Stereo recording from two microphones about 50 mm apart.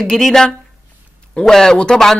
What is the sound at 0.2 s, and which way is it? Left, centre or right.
Speech, centre.